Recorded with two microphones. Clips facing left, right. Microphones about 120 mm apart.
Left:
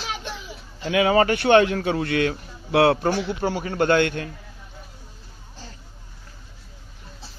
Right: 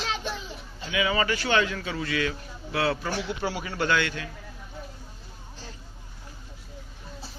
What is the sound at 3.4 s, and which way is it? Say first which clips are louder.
Speech: left 8 dB; 45° left (ahead or behind).